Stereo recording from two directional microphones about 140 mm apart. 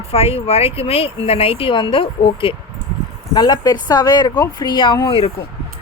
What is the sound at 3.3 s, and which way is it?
Speech, 30° left (ahead or behind).